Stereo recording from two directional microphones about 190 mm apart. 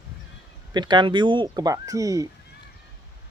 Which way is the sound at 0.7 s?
25° right (ahead or behind).